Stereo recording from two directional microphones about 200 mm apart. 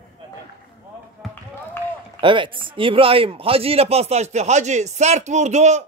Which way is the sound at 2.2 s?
25° right (ahead or behind).